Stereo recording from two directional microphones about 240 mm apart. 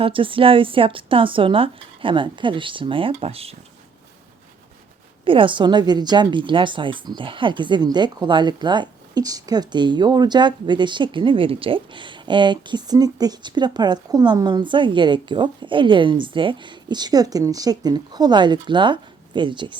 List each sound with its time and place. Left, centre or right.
0.0 s a woman's voice: right
5.2 s a woman's voice: right